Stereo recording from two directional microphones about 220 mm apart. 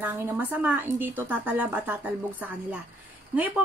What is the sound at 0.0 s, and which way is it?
A woman's voice, 10° right (ahead or behind).